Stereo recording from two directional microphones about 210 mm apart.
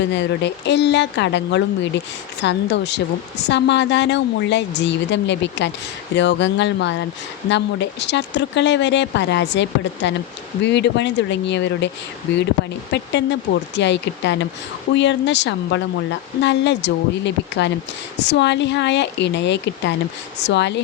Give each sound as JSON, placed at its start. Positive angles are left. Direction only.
{"t": 0.1, "sound": "a woman's voice", "side_deg": 55}